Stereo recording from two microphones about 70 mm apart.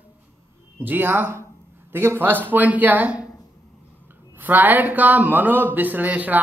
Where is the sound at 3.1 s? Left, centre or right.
Left.